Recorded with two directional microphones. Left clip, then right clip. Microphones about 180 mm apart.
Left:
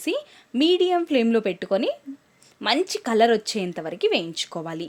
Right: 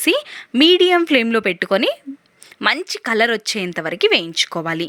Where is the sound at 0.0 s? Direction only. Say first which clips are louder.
Right 9 dB; 15° right (ahead or behind).